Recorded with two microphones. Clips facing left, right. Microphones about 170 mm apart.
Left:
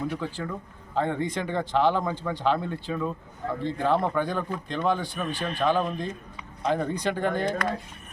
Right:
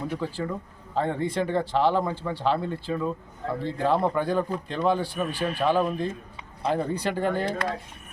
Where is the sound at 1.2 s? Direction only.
35° right (ahead or behind).